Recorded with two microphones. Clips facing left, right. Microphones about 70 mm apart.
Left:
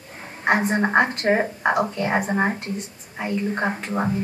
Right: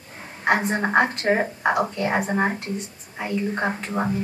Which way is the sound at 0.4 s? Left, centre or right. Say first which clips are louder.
Left 1 dB; centre.